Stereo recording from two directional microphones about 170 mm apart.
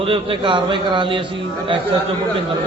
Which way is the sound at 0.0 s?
30° right (ahead or behind).